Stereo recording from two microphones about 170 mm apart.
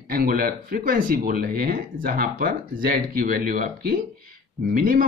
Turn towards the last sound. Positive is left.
turn(degrees=-55)  # may be behind; listen again after turning